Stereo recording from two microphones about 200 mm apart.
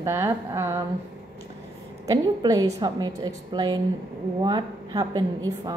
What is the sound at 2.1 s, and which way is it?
A woman's voice, 15° right (ahead or behind).